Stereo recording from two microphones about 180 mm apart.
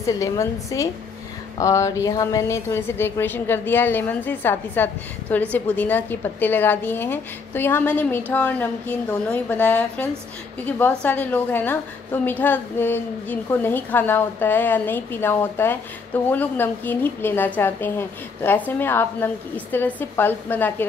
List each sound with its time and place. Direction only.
0.0 s a woman's voice: 20° left (ahead or behind)